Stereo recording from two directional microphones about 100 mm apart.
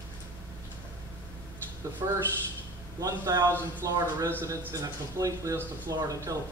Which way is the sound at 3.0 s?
35° right (ahead or behind).